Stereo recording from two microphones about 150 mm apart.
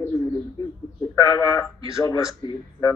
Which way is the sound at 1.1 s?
30° left (ahead or behind).